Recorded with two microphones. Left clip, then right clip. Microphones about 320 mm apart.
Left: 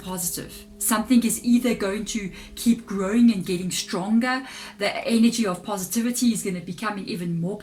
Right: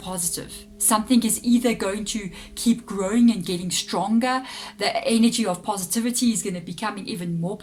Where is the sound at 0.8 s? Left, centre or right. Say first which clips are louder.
Right 1 dB; centre.